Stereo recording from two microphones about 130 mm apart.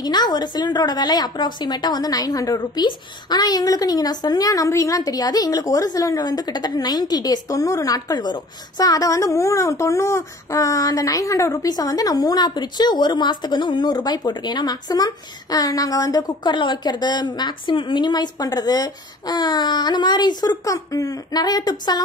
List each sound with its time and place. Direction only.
0.0 s a woman's voice: 35° left (ahead or behind)